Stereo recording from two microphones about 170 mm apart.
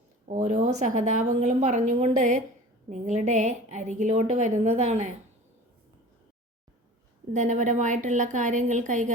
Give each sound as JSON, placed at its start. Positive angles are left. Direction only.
{"t": 0.3, "sound": "a woman's voice", "side_deg": -45}
{"t": 7.3, "sound": "a woman's voice", "side_deg": -45}